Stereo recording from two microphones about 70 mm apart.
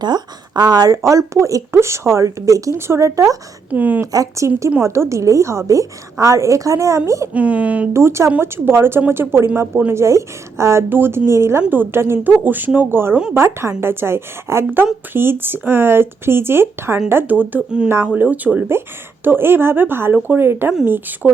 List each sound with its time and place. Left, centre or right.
0.0 s speech: right
1.0 s a woman's voice: right
2.7 s a woman's voice: right
3.7 s a woman's voice: right
4.1 s a woman's voice: right
7.3 s a woman's voice: centre
7.9 s speech: right
9.9 s a woman's voice: right